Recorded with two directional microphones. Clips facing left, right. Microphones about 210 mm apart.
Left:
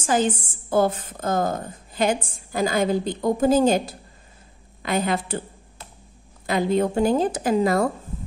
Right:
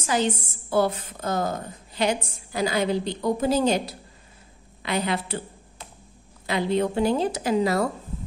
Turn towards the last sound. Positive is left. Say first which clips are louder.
# left 2 dB
turn(degrees=50)  # may be behind; listen again after turning